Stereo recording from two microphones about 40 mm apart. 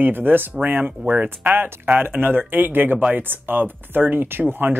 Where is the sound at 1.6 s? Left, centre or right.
Right.